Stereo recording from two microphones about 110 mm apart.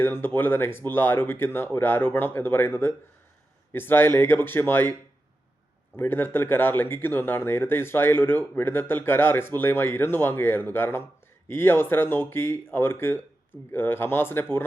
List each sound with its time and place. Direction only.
0.0 s speech: 20° left (ahead or behind)
6.0 s speech: 20° left (ahead or behind)